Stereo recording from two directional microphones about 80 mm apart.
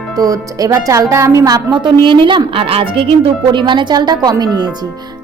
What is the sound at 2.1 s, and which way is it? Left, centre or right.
A woman's voice, right.